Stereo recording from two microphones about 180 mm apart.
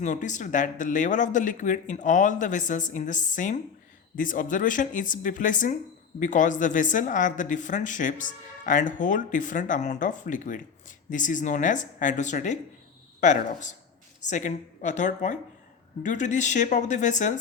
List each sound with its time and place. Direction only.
0.0 s speech: 45° left (ahead or behind)